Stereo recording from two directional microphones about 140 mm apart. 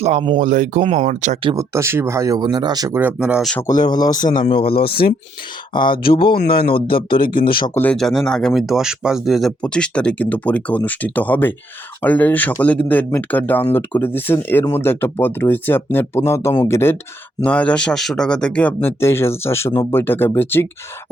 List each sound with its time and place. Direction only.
0.0 s speech: 50° right (ahead or behind)
0.3 s speech: 65° right (ahead or behind)
1.5 s speech: 20° right (ahead or behind)
3.0 s speech: 10° right (ahead or behind)
3.8 s a man's voice: 30° left (ahead or behind)
4.6 s speech: 90° left
5.7 s speech: 35° left (ahead or behind)
6.5 s speech: 90° left
7.1 s speech: 35° left (ahead or behind)
7.7 s speech: 15° left (ahead or behind)
7.9 s speech: 5° left (ahead or behind)